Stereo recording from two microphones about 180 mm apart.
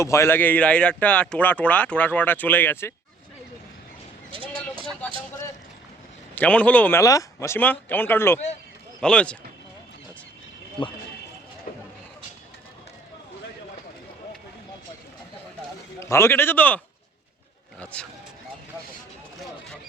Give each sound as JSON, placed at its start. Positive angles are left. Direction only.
{"t": 0.0, "sound": "speech", "side_deg": 15}
{"t": 4.3, "sound": "a sound", "side_deg": -30}
{"t": 6.3, "sound": "speech", "side_deg": 10}
{"t": 10.8, "sound": "speech", "side_deg": 25}
{"t": 16.0, "sound": "speech", "side_deg": 15}
{"t": 17.9, "sound": "speech", "side_deg": 5}